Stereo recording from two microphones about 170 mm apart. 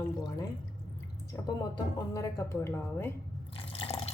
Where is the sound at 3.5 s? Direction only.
35° left (ahead or behind).